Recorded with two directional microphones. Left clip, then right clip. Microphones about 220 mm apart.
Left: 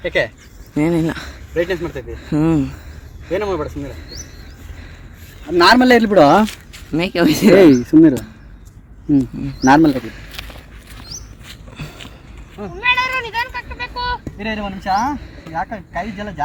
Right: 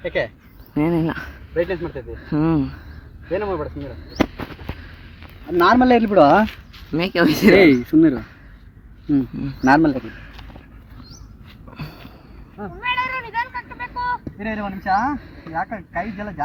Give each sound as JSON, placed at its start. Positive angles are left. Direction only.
{"t": 0.0, "sound": "speech", "side_deg": 0}
{"t": 3.3, "sound": "speech", "side_deg": -10}
{"t": 5.5, "sound": "a man's voice", "side_deg": 10}
{"t": 6.4, "sound": "speech", "side_deg": 5}
{"t": 7.5, "sound": "a man's voice", "side_deg": 30}
{"t": 9.4, "sound": "speech", "side_deg": 0}
{"t": 9.6, "sound": "a man's voice", "side_deg": 25}
{"t": 11.8, "sound": "sniff", "side_deg": -5}
{"t": 12.8, "sound": "cat", "side_deg": 40}
{"t": 13.4, "sound": "vehicle", "side_deg": 40}
{"t": 14.3, "sound": "speech", "side_deg": 15}